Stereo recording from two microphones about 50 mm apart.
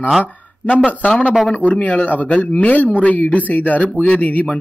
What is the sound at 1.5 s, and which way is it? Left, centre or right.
A man's voice, left.